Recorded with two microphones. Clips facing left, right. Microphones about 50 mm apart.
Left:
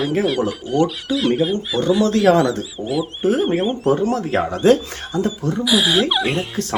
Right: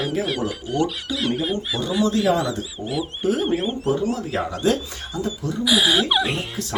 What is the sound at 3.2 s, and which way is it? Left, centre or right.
Speech, left.